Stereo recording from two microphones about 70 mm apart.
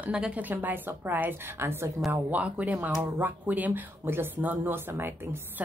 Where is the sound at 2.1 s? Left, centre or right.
Right.